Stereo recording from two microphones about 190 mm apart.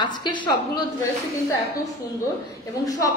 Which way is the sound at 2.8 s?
20° left (ahead or behind).